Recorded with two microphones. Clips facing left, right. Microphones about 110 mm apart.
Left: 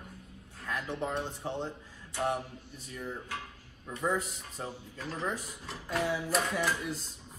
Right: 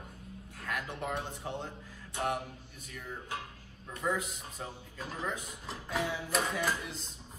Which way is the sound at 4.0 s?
35° left (ahead or behind).